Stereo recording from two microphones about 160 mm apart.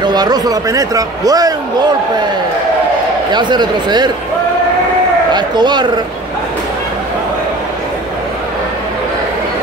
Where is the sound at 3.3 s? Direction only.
25° right (ahead or behind).